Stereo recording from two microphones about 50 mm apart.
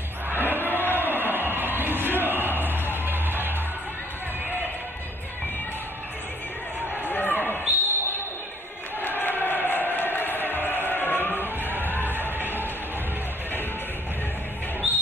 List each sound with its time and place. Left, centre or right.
0.3 s crowd: right
0.9 s music: right
7.1 s a sound: left
7.6 s basketball bounce: right
9.0 s a sound: left
12.1 s music: left